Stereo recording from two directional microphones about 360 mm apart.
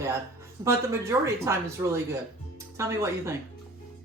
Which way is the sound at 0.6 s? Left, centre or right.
Centre.